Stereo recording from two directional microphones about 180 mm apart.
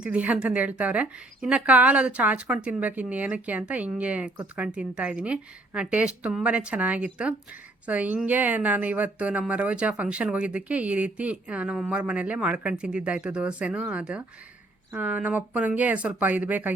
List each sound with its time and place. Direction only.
0.0 s speech: 5° right (ahead or behind)